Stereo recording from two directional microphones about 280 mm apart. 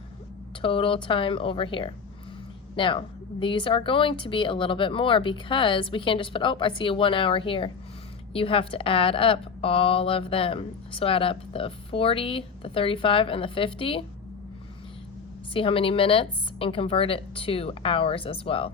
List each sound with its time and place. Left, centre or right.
0.6 s a woman's voice: centre
15.5 s a woman's voice: centre